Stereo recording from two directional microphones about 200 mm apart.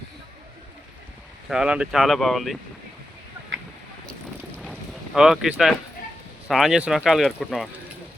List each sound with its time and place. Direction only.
1.5 s speech: 5° right (ahead or behind)
4.5 s a sound: centre (ahead or behind)
6.5 s speech: centre (ahead or behind)